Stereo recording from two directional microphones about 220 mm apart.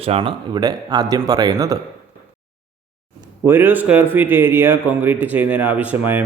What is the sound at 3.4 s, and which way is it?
A man's voice, 10° right (ahead or behind).